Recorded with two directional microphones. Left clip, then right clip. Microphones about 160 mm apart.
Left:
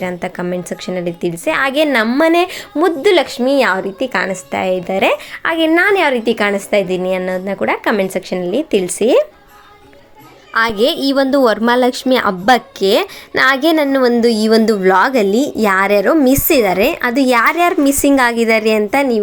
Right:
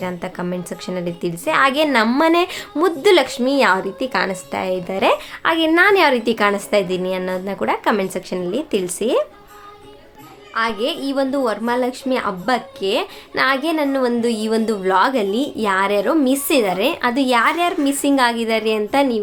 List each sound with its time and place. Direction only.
0.0 s a woman's voice: 20° left (ahead or behind)
10.5 s a woman's voice: 45° left (ahead or behind)